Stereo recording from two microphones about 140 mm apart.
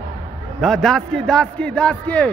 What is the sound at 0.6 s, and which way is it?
A man's voice, centre (ahead or behind).